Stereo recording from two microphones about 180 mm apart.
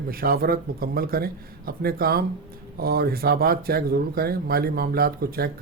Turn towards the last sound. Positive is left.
turn(degrees=-55)  # may be behind; listen again after turning